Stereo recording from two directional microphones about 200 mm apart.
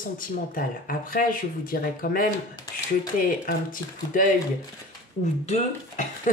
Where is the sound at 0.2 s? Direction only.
45° left (ahead or behind).